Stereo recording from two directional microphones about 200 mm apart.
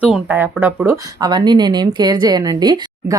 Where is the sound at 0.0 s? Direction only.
10° right (ahead or behind).